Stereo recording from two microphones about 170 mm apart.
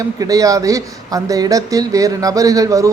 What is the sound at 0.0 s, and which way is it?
Speech, 20° right (ahead or behind).